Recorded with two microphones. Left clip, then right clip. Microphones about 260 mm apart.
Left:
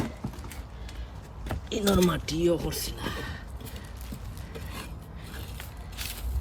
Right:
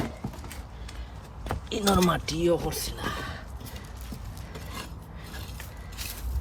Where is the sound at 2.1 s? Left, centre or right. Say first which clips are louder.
Right 2 dB; centre.